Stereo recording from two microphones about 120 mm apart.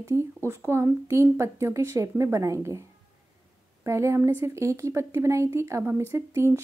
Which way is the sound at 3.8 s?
25° right (ahead or behind).